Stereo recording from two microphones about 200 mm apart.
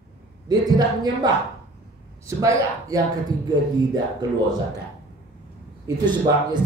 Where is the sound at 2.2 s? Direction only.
15° right (ahead or behind).